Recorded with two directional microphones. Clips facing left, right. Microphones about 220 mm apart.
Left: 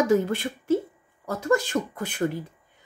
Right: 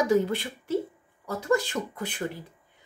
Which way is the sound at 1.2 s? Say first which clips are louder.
Left 2 dB; 45° left (ahead or behind).